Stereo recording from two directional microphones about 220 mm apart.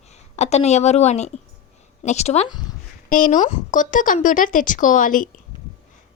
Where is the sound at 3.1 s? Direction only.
35° left (ahead or behind).